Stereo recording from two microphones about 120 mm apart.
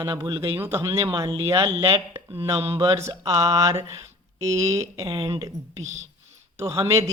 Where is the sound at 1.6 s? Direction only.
45° right (ahead or behind).